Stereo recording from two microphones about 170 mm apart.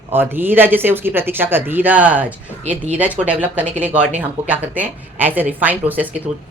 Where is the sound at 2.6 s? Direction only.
40° right (ahead or behind).